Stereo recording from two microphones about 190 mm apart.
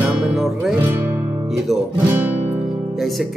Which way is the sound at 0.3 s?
5° right (ahead or behind).